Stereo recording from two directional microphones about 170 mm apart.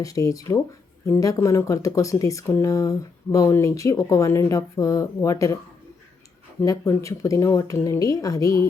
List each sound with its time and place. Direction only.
0.0 s speech: 20° left (ahead or behind)
6.6 s speech: 15° left (ahead or behind)